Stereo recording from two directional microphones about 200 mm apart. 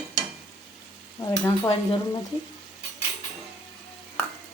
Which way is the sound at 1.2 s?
20° left (ahead or behind).